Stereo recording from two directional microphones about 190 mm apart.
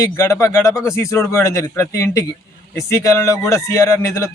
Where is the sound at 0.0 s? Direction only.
15° left (ahead or behind).